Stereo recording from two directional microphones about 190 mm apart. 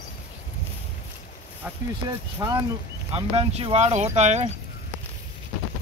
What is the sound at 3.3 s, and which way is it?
Speech, 35° right (ahead or behind).